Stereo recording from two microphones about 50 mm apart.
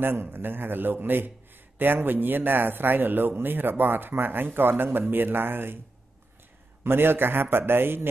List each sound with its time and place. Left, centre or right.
0.0 s speech: right
6.8 s speech: right